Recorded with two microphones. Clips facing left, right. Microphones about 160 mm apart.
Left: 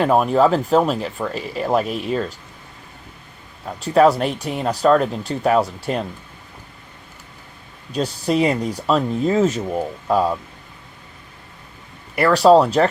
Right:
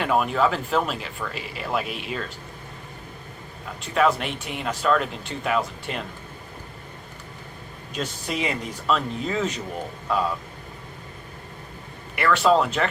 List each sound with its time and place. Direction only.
0.0 s speech: 40° left (ahead or behind)
3.7 s speech: 40° left (ahead or behind)
7.9 s speech: 35° left (ahead or behind)
12.1 s speech: 40° left (ahead or behind)